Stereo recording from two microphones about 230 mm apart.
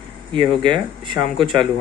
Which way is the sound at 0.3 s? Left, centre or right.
Right.